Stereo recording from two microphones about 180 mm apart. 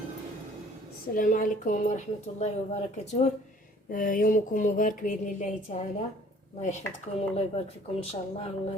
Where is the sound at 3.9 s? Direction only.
50° left (ahead or behind).